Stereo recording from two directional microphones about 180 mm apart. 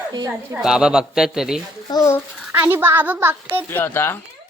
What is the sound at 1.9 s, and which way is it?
Speech, 15° left (ahead or behind).